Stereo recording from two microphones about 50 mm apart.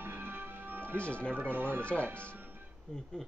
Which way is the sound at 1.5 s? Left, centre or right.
Right.